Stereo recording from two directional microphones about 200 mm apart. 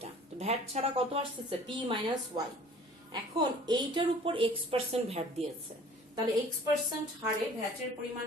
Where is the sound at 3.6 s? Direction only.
20° right (ahead or behind).